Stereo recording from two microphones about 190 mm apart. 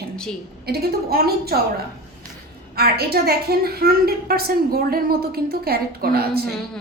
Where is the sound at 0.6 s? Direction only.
55° right (ahead or behind).